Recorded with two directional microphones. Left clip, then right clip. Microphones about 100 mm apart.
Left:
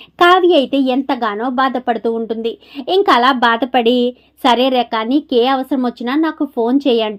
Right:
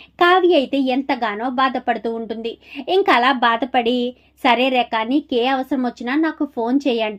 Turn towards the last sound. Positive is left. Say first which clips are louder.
# left 5 dB
turn(degrees=35)  # may be behind; listen again after turning